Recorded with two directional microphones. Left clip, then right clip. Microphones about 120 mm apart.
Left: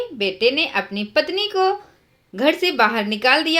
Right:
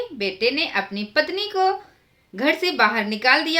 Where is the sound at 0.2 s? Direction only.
25° left (ahead or behind).